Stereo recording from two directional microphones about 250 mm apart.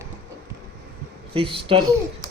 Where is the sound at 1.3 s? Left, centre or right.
Right.